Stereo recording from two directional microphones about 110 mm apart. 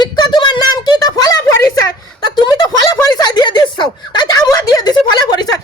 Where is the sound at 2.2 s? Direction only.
40° left (ahead or behind).